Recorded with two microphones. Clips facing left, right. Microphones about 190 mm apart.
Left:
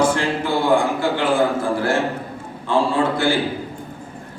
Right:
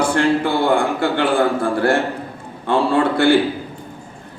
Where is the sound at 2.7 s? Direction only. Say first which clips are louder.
Right 2 dB; 60° right (ahead or behind).